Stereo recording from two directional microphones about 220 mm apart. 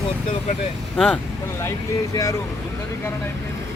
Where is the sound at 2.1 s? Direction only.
15° left (ahead or behind).